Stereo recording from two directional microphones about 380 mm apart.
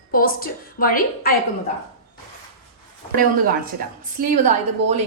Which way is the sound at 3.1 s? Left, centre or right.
Right.